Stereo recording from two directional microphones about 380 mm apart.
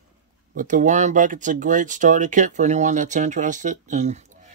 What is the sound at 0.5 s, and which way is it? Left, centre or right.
Speech, centre.